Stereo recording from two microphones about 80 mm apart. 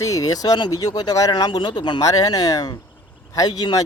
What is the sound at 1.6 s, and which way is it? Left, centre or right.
Speech, left.